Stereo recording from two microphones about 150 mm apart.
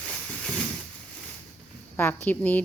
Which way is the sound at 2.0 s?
15° left (ahead or behind).